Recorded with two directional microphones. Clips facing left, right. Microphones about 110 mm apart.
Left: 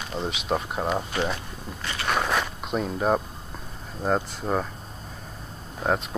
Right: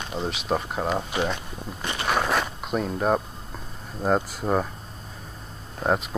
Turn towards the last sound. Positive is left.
turn(degrees=5)  # may be behind; listen again after turning